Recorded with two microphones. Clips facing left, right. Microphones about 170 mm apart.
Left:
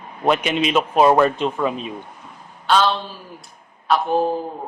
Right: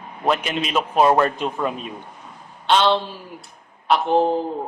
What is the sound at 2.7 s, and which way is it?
A man's voice, 25° right (ahead or behind).